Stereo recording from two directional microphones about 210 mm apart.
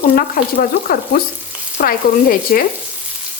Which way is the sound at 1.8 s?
40° left (ahead or behind).